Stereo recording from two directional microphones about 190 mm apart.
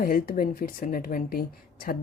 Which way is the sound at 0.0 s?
50° left (ahead or behind).